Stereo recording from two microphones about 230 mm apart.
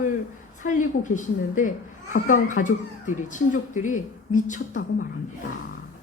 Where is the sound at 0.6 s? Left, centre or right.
Left.